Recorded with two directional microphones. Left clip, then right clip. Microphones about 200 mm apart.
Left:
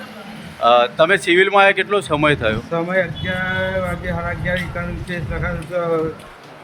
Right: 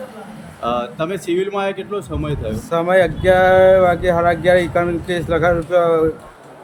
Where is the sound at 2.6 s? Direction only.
30° right (ahead or behind).